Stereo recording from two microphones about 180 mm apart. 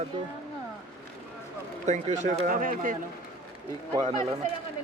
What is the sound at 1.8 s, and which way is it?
Speech, 40° right (ahead or behind).